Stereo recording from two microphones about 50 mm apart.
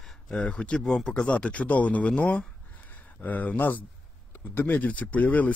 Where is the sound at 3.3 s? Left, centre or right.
Left.